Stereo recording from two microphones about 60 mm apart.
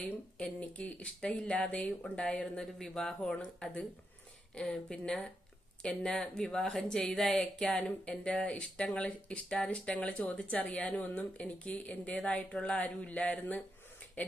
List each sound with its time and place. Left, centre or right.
0.0 s a woman's voice: centre
4.6 s a woman's voice: centre